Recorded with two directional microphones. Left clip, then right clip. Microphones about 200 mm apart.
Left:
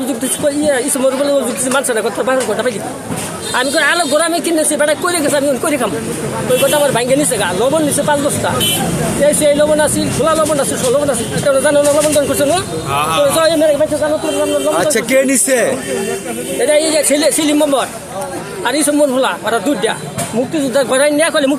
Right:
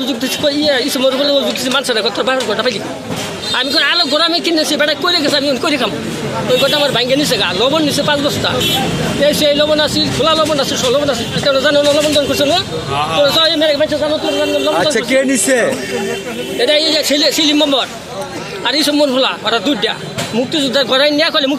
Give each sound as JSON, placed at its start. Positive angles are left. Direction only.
{"t": 0.1, "sound": "a man's voice", "side_deg": 5}
{"t": 12.9, "sound": "speech", "side_deg": 25}
{"t": 13.2, "sound": "a man's voice", "side_deg": 5}